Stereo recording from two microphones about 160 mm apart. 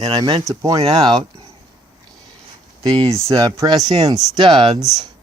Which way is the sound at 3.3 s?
25° right (ahead or behind).